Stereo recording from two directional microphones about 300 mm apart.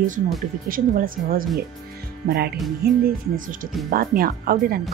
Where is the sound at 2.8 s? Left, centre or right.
Right.